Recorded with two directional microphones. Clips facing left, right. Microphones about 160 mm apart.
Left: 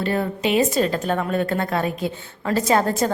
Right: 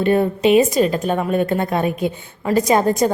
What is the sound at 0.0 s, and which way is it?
A woman's voice, 20° right (ahead or behind).